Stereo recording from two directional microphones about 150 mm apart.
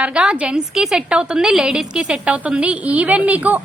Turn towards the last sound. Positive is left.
turn(degrees=-10)  # may be behind; listen again after turning